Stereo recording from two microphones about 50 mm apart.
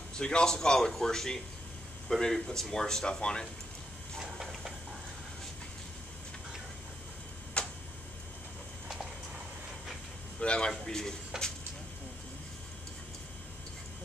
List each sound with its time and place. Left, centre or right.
0.1 s speech: centre
7.6 s tick-tock: left
10.4 s a man's voice: left